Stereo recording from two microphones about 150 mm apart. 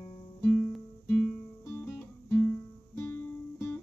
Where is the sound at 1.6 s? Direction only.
15° left (ahead or behind).